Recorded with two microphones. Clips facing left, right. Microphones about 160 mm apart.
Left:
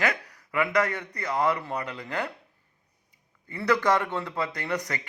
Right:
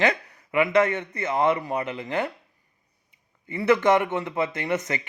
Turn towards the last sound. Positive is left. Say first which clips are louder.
# right 4 dB
turn(degrees=-20)  # may be behind; listen again after turning